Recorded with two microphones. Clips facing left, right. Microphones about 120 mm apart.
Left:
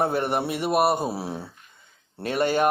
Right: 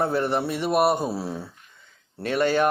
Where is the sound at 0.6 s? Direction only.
5° left (ahead or behind).